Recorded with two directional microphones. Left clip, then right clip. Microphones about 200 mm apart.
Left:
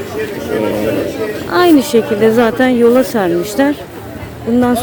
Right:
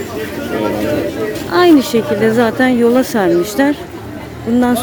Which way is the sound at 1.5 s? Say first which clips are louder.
Even; 5° left (ahead or behind).